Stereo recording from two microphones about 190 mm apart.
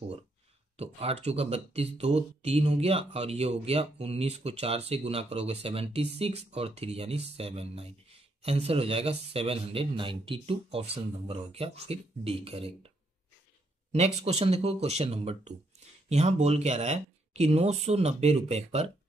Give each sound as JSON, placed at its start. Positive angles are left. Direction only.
{"t": 0.7, "sound": "speech", "side_deg": -30}
{"t": 13.9, "sound": "speech", "side_deg": -35}